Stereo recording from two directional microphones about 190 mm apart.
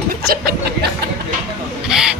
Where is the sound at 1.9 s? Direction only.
5° right (ahead or behind).